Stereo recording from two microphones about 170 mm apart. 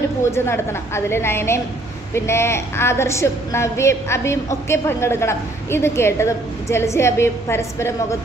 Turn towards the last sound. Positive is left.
turn(degrees=15)  # may be behind; listen again after turning